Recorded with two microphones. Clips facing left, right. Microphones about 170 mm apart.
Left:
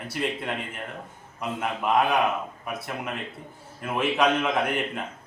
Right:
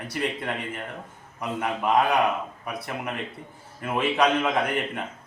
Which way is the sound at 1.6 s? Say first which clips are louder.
Right 1 dB; centre (ahead or behind).